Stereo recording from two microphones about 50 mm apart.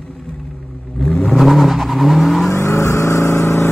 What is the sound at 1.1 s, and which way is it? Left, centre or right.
Vehicle, centre.